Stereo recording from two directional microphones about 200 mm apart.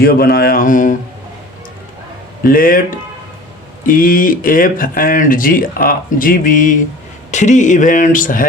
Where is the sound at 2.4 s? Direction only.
45° left (ahead or behind).